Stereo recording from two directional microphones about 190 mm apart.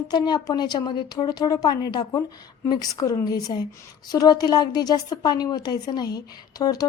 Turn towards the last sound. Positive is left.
turn(degrees=20)  # may be behind; listen again after turning